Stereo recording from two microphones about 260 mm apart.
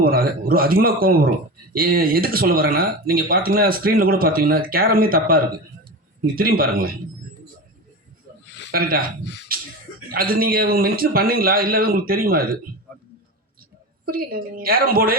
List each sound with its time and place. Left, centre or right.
0.0 s speech: right
8.7 s speech: right
9.5 s a sound: right
10.1 s speech: right
14.0 s speech: right